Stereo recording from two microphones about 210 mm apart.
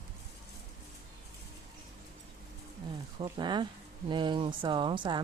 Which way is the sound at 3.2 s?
20° right (ahead or behind).